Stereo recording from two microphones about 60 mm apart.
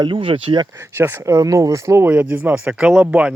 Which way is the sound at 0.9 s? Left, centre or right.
Right.